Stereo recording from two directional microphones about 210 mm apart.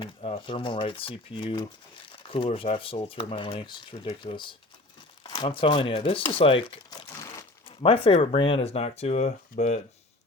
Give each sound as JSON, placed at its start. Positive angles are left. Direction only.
{"t": 0.0, "sound": "speech", "side_deg": 25}